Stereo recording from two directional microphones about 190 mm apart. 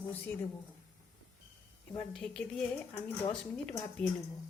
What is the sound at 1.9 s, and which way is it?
Speech, 5° left (ahead or behind).